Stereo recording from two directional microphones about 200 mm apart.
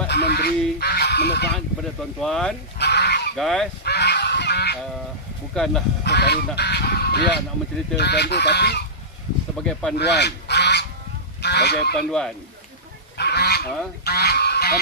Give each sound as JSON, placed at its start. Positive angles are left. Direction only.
{"t": 0.1, "sound": "goose", "side_deg": 55}
{"t": 2.1, "sound": "speech", "side_deg": 0}
{"t": 2.8, "sound": "goose", "side_deg": 55}
{"t": 3.3, "sound": "speech", "side_deg": 0}
{"t": 3.8, "sound": "goose", "side_deg": 55}
{"t": 5.5, "sound": "speech", "side_deg": 5}
{"t": 6.0, "sound": "speech", "side_deg": 55}
{"t": 9.6, "sound": "speech", "side_deg": 5}
{"t": 9.9, "sound": "goose", "side_deg": 60}
{"t": 11.4, "sound": "speech", "side_deg": 55}
{"t": 13.2, "sound": "goose", "side_deg": 55}